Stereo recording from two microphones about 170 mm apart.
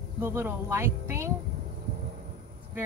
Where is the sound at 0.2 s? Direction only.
15° right (ahead or behind).